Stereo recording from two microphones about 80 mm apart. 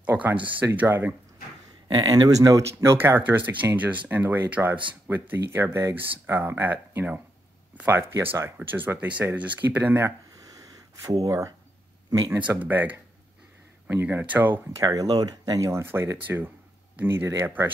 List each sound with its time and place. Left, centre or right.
0.0 s speech: right
2.1 s speech: right
3.0 s speech: right
11.0 s speech: right
12.3 s speech: centre
14.1 s speech: right
14.8 s speech: right
15.8 s speech: right